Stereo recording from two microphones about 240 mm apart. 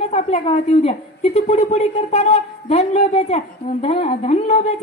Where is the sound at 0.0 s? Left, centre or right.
Left.